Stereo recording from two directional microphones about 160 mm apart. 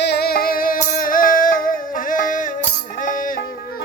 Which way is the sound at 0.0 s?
85° left.